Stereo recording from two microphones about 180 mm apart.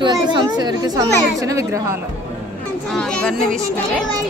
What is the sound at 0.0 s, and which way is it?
A woman's voice, 25° right (ahead or behind).